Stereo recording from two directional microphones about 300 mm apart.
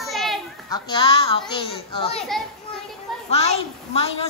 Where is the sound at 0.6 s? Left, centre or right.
Centre.